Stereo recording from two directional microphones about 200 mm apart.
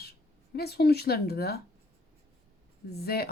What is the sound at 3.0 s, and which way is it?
Speech, 50° left (ahead or behind).